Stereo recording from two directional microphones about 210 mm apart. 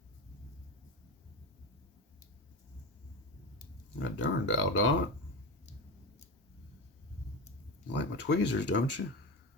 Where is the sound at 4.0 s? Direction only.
65° left (ahead or behind).